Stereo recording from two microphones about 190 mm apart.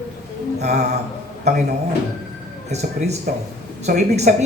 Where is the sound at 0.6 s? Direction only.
35° right (ahead or behind).